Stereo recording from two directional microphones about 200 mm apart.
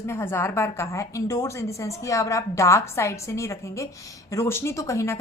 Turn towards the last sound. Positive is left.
turn(degrees=15)  # may be behind; listen again after turning